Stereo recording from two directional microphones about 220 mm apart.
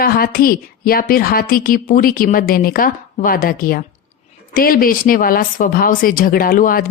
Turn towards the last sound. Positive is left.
turn(degrees=40)  # may be behind; listen again after turning